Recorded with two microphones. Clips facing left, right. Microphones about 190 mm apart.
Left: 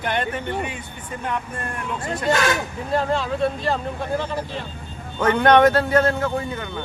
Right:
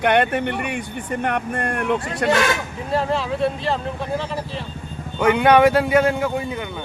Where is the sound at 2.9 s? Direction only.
Centre (ahead or behind).